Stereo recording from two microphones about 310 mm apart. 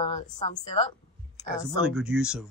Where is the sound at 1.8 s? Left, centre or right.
Centre.